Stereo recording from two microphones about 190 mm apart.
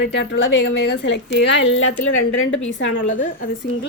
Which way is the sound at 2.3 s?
90° left.